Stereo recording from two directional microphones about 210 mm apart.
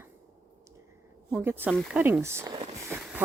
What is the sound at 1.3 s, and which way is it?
Speech, 10° right (ahead or behind).